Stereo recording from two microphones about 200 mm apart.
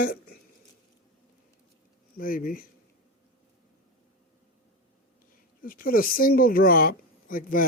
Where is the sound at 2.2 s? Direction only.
45° left (ahead or behind).